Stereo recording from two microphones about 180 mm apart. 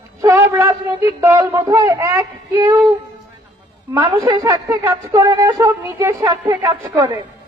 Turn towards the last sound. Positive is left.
turn(degrees=-20)  # may be behind; listen again after turning